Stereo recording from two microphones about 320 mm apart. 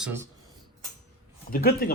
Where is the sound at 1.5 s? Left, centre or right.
Left.